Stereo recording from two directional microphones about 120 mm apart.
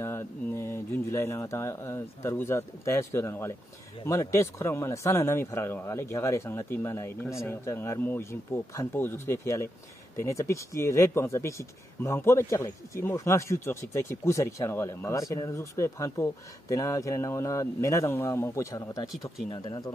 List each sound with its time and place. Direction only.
0.0 s speech: 20° left (ahead or behind)